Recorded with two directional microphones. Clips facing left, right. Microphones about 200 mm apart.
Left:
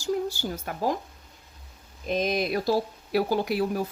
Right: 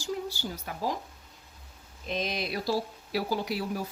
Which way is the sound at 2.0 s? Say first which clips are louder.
Left 7 dB; 50° left (ahead or behind).